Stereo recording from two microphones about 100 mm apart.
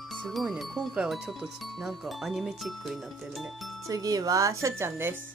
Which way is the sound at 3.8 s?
35° right (ahead or behind).